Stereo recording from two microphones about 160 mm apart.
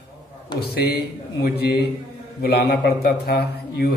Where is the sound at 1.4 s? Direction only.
90° left.